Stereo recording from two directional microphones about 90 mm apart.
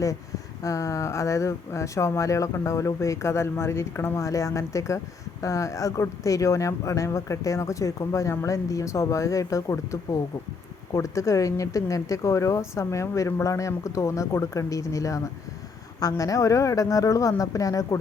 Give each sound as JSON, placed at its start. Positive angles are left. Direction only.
{"t": 0.6, "sound": "speech", "side_deg": 40}